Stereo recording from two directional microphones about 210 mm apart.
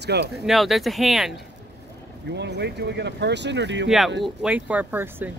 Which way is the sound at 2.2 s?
55° right (ahead or behind).